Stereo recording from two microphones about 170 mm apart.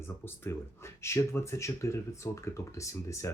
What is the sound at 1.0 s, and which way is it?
Speech, 15° left (ahead or behind).